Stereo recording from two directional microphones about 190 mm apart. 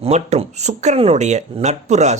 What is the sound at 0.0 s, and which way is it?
Speech, 35° right (ahead or behind).